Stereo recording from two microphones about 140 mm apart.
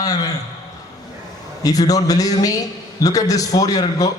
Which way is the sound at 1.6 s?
25° left (ahead or behind).